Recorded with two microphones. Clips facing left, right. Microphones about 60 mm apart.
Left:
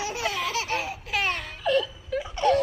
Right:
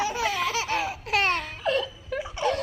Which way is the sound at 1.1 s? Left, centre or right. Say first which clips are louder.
Right 3 dB; right.